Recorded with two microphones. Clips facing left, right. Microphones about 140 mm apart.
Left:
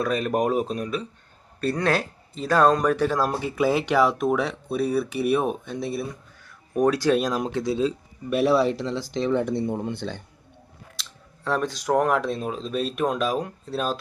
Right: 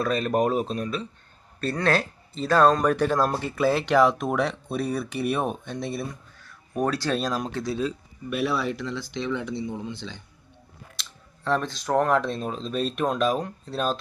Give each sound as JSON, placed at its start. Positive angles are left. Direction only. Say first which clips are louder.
{"t": 0.0, "sound": "speech", "louder": "even", "side_deg": 10}
{"t": 6.4, "sound": "speech", "louder": "left 5 dB", "side_deg": 15}
{"t": 8.3, "sound": "speech", "louder": "left 6 dB", "side_deg": 35}
{"t": 11.0, "sound": "scissors", "louder": "left 1 dB", "side_deg": 0}
{"t": 11.4, "sound": "speech", "louder": "left 1 dB", "side_deg": 10}